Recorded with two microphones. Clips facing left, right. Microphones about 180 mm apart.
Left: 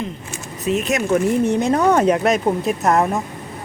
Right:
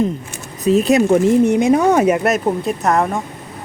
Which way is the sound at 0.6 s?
35° right (ahead or behind).